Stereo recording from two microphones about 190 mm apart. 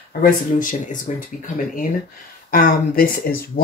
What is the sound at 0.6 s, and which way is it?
Speech, 45° left (ahead or behind).